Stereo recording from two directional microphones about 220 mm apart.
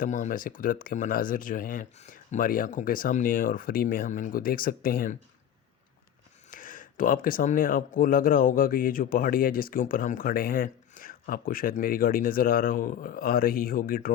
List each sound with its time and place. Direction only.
0.0 s speech: 35° left (ahead or behind)
6.5 s speech: 40° left (ahead or behind)